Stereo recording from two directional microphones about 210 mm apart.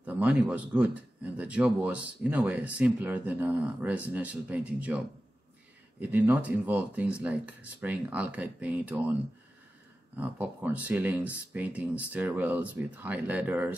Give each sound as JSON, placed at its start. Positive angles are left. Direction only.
{"t": 0.0, "sound": "a man's voice", "side_deg": -5}
{"t": 10.1, "sound": "a man's voice", "side_deg": -10}